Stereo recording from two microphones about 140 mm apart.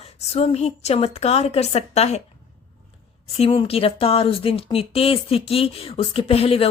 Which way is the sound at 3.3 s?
45° left (ahead or behind).